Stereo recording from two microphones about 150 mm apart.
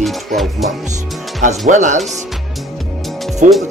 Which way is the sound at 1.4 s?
55° right (ahead or behind).